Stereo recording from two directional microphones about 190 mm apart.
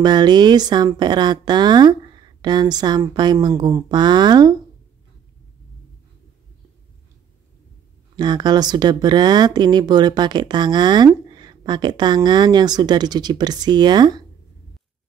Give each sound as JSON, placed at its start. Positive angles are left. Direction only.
{"t": 0.0, "sound": "speech", "side_deg": -20}
{"t": 8.2, "sound": "speech", "side_deg": -20}